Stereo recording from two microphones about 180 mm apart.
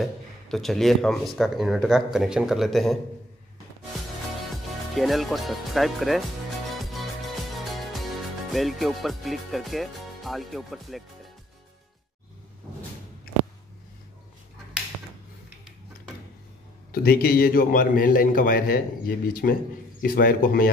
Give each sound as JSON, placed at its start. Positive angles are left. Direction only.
{"t": 0.0, "sound": "speech", "side_deg": 0}
{"t": 4.9, "sound": "speech", "side_deg": 0}
{"t": 6.8, "sound": "music", "side_deg": 0}
{"t": 7.5, "sound": "speech", "side_deg": 0}
{"t": 16.9, "sound": "a man's voice", "side_deg": 60}